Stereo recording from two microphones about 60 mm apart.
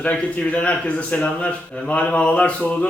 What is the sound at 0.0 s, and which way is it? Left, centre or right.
A man's voice, left.